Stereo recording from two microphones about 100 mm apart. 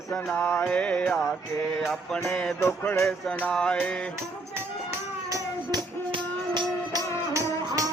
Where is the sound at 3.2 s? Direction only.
10° left (ahead or behind).